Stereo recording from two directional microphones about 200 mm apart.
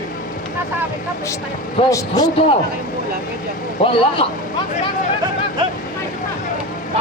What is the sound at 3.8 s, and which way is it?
Speech, 25° left (ahead or behind).